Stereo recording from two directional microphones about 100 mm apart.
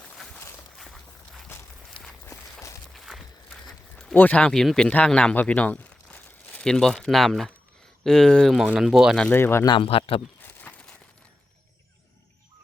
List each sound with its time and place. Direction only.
0.8 s walk: centre (ahead or behind)
2.6 s walk: 30° left (ahead or behind)
2.9 s walk: centre (ahead or behind)
3.7 s a sound: centre (ahead or behind)
4.1 s speech: 15° left (ahead or behind); by 9.1 s 5° right (ahead or behind)
9.3 s speech: 25° left (ahead or behind)
9.6 s speech: 60° left (ahead or behind)
10.4 s a sound: 15° left (ahead or behind)